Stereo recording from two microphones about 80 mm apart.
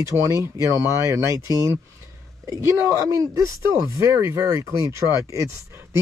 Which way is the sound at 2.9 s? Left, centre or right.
Right.